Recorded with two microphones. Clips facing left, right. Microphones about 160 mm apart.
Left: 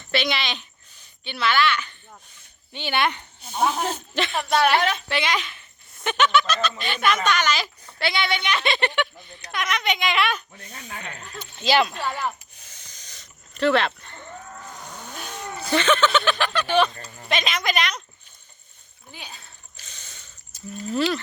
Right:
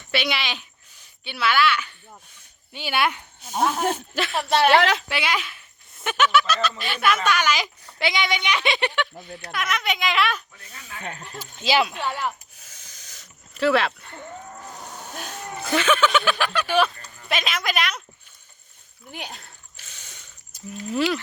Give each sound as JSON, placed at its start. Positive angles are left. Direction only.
{"t": 0.0, "sound": "a child's voice", "side_deg": -10}
{"t": 4.7, "sound": "a woman's voice", "side_deg": -90}
{"t": 5.0, "sound": "a child's voice", "side_deg": -10}
{"t": 10.6, "sound": "speech", "side_deg": 40}
{"t": 11.6, "sound": "speech", "side_deg": -5}
{"t": 14.7, "sound": "vehicle", "side_deg": 0}
{"t": 15.7, "sound": "a child's voice", "side_deg": -5}
{"t": 19.1, "sound": "a sound", "side_deg": -70}
{"t": 19.8, "sound": "mechanisms", "side_deg": -10}
{"t": 20.9, "sound": "speech", "side_deg": -10}